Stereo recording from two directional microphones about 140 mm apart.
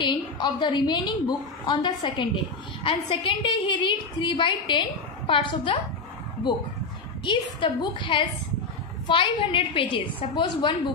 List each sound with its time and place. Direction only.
0.0 s a woman's voice: 35° left (ahead or behind)